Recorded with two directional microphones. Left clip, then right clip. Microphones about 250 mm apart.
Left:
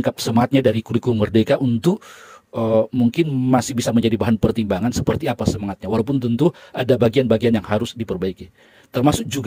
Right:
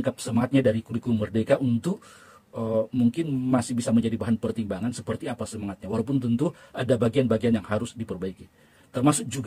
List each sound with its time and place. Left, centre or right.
0.0 s speech: left